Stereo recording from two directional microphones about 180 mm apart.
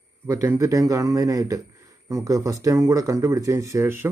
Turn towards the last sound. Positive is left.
turn(degrees=-15)  # may be behind; listen again after turning